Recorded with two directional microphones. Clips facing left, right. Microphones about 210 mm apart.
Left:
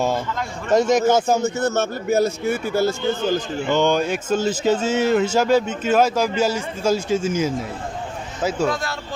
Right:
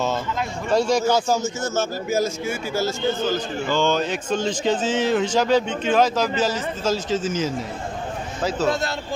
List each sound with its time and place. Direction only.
0.7 s a man's voice: 20° left (ahead or behind)
1.4 s a man's voice: 60° left (ahead or behind)
3.6 s speech: 20° left (ahead or behind)
8.6 s speech: 25° right (ahead or behind)